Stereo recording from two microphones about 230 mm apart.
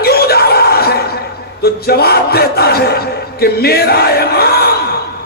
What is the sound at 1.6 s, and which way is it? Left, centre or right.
Speech, left.